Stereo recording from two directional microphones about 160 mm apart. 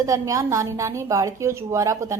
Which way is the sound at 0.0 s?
20° right (ahead or behind).